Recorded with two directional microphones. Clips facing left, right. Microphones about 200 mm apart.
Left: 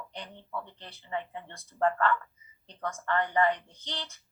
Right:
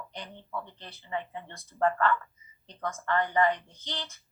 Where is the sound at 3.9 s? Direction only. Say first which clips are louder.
Right 1 dB; 35° left (ahead or behind).